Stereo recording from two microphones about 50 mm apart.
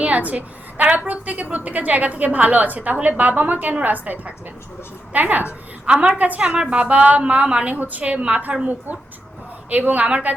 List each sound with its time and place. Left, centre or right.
0.0 s a woman's voice: right
9.6 s a woman's voice: right